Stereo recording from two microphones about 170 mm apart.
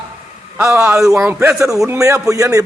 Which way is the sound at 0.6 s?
15° right (ahead or behind).